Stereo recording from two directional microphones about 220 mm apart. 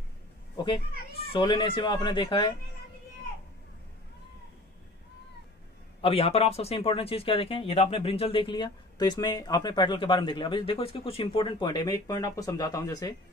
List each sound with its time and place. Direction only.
1.3 s speech: 20° left (ahead or behind)
5.9 s speech: 25° left (ahead or behind)